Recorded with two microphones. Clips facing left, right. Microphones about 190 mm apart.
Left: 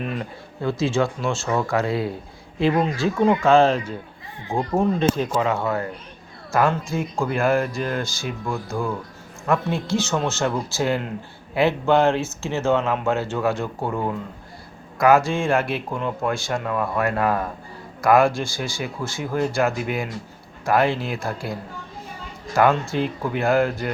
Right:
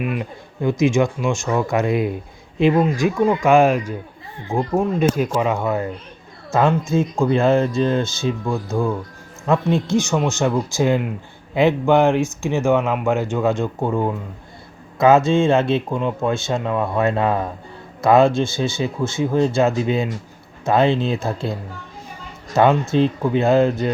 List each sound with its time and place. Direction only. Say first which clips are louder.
0.0 s speech: right 4 dB; 10° right (ahead or behind)
22.5 s speech: right 4 dB; 20° right (ahead or behind)